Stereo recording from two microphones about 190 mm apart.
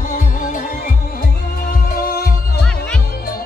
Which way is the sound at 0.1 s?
45° left (ahead or behind).